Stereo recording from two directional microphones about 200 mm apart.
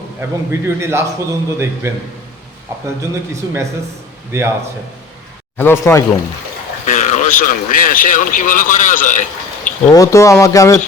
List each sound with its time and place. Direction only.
0.2 s a man's voice: 15° right (ahead or behind)
3.0 s a man's voice: 15° right (ahead or behind)
5.5 s speech: 10° left (ahead or behind)
6.8 s speech: 35° left (ahead or behind)
9.9 s speech: 15° left (ahead or behind)